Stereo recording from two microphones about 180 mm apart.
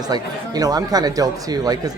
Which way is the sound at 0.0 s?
20° right (ahead or behind).